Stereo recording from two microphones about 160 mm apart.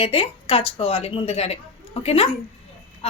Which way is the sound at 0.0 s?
35° left (ahead or behind).